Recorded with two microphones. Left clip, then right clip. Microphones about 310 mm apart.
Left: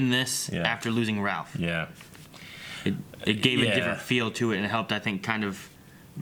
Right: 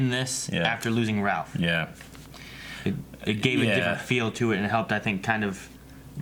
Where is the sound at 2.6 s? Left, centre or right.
Left.